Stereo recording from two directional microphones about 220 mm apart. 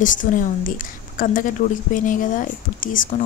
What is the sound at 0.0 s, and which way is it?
A woman's voice, 35° left (ahead or behind).